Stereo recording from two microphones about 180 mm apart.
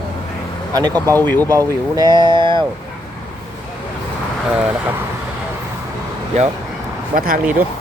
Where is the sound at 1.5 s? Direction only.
20° right (ahead or behind).